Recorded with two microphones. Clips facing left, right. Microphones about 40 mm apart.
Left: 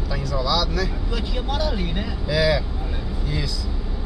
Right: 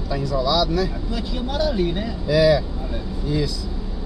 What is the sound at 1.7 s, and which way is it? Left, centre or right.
Speech, centre.